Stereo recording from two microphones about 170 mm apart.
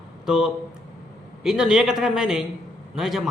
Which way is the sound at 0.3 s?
5° right (ahead or behind).